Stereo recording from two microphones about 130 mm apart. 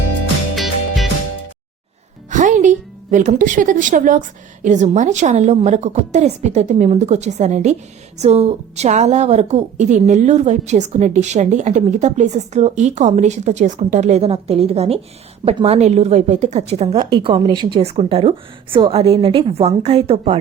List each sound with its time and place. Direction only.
0.5 s music: centre (ahead or behind)
2.3 s music: 70° right (ahead or behind)
4.6 s a woman's voice: 65° right (ahead or behind); by 17.1 s 50° right (ahead or behind)
17.1 s a woman's voice: 35° right (ahead or behind)